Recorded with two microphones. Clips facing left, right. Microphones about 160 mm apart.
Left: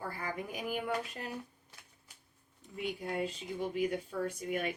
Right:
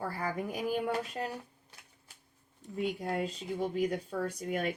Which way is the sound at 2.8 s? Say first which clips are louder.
Right 3 dB; 35° right (ahead or behind).